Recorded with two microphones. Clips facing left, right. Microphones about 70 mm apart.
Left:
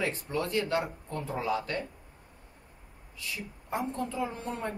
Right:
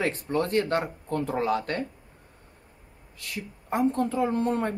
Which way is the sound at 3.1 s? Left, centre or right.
Right.